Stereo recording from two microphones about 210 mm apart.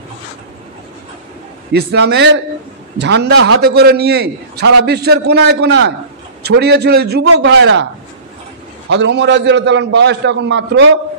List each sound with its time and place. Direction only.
1.7 s a man's voice: 50° right (ahead or behind)
8.8 s a man's voice: 55° right (ahead or behind)